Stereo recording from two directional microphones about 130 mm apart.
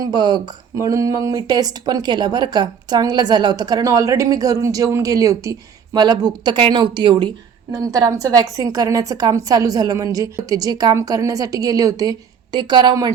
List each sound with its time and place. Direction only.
0.0 s speech: 35° right (ahead or behind)